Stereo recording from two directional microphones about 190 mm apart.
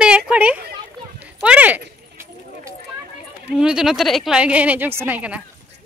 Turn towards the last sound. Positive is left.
turn(degrees=-10)  # may be behind; listen again after turning